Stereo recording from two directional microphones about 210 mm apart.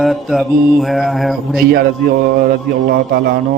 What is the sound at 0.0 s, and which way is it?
Mantra, centre (ahead or behind).